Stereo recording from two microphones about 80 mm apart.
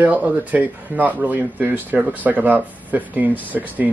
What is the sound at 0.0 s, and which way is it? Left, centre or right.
Speech, centre.